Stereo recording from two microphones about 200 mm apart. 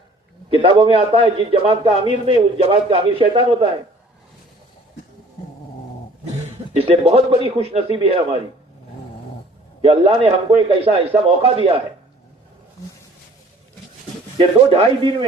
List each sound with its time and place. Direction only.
0.5 s a man's voice: 25° right (ahead or behind)
6.7 s a man's voice: 30° right (ahead or behind)
9.8 s a man's voice: 30° right (ahead or behind)
14.3 s a man's voice: 25° right (ahead or behind)